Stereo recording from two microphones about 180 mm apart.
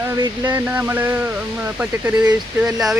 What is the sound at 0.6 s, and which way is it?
A man's voice, 10° right (ahead or behind).